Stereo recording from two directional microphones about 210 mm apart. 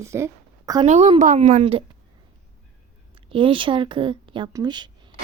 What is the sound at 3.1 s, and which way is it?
Speech, 25° right (ahead or behind).